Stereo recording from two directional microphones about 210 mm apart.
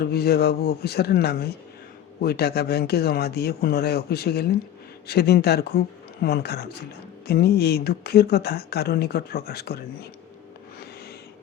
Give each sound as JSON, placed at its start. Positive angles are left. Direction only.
{"t": 0.0, "sound": "speech", "side_deg": 50}